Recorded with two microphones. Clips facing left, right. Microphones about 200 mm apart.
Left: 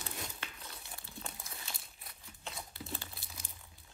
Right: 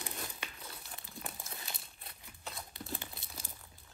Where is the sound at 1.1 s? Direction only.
15° right (ahead or behind).